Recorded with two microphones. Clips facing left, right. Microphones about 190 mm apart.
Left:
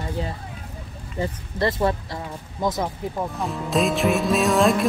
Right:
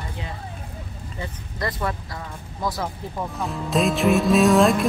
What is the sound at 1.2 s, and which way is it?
Speech, 30° left (ahead or behind).